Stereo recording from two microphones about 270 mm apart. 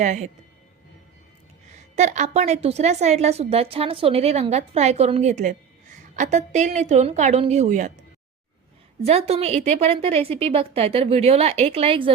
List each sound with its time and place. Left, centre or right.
0.0 s a woman's voice: right
1.7 s a woman's voice: right
9.0 s a woman's voice: right